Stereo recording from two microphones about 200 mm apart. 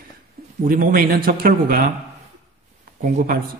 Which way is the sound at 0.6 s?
45° right (ahead or behind).